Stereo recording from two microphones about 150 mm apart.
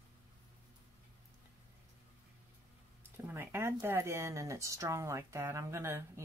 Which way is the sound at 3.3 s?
15° right (ahead or behind).